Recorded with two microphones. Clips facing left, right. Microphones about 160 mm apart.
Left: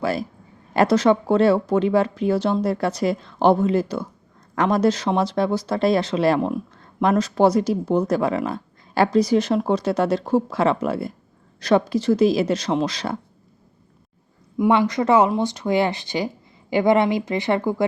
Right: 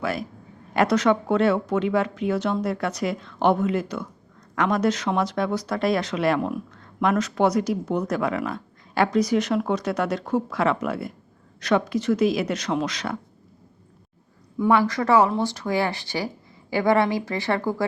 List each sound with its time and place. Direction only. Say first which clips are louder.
0.0 s speech: left 4 dB; 30° left (ahead or behind)
14.6 s speech: left 2 dB; 20° left (ahead or behind)